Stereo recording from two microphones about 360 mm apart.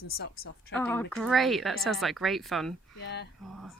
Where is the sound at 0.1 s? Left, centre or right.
Left.